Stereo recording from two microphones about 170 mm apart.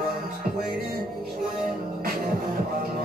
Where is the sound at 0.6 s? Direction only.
60° right (ahead or behind).